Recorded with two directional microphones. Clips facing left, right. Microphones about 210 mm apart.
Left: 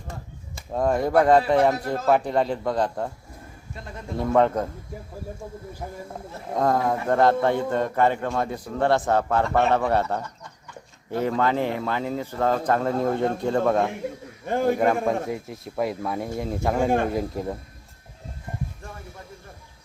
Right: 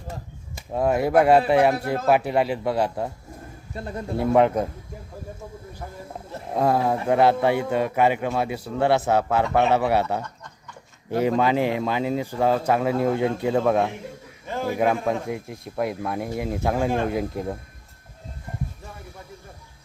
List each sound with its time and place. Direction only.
0.5 s speech: 10° right (ahead or behind)
3.8 s speech: 35° right (ahead or behind)
4.2 s speech: 10° right (ahead or behind)
6.5 s speech: 10° right (ahead or behind)
14.4 s a man's voice: 55° left (ahead or behind)
14.8 s speech: 5° right (ahead or behind)